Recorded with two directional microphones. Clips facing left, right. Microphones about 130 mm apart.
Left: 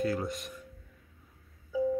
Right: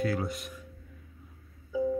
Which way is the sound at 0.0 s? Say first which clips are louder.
Right 1 dB; centre (ahead or behind).